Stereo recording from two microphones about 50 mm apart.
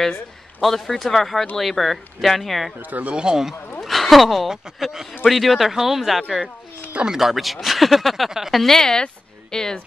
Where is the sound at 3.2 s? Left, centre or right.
Centre.